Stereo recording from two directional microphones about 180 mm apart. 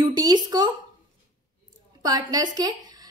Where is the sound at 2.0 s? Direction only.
20° right (ahead or behind).